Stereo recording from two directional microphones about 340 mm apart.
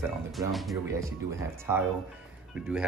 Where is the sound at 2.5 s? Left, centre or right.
Centre.